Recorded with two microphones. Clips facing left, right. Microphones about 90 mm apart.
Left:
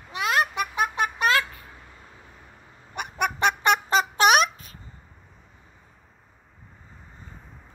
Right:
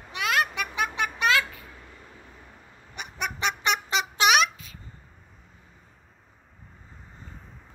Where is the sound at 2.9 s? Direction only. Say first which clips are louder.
Left 6 dB; 50° left (ahead or behind).